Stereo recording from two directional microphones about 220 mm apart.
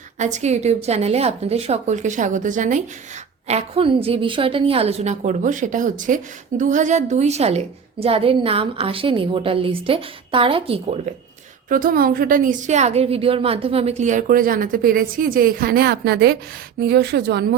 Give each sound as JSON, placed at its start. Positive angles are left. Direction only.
{"t": 0.2, "sound": "a woman's voice", "side_deg": -30}
{"t": 11.7, "sound": "a woman's voice", "side_deg": -40}